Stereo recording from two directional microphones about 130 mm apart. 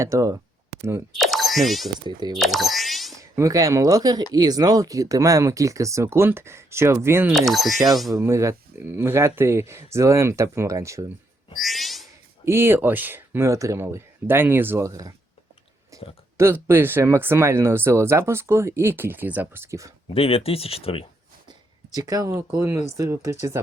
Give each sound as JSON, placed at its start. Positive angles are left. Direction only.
{"t": 0.0, "sound": "speech", "side_deg": -25}
{"t": 1.1, "sound": "speech", "side_deg": 0}
{"t": 2.4, "sound": "a sound", "side_deg": 0}
{"t": 3.2, "sound": "speech", "side_deg": -25}
{"t": 7.3, "sound": "speech", "side_deg": 0}
{"t": 8.1, "sound": "speech", "side_deg": -20}
{"t": 11.5, "sound": "frog", "side_deg": 0}
{"t": 12.5, "sound": "speech", "side_deg": -20}
{"t": 15.9, "sound": "a sound", "side_deg": -25}
{"t": 16.4, "sound": "speech", "side_deg": -20}
{"t": 20.1, "sound": "speech", "side_deg": 50}
{"t": 21.9, "sound": "speech", "side_deg": -25}